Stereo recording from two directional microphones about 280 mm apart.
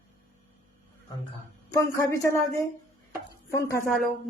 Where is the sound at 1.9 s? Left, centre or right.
Centre.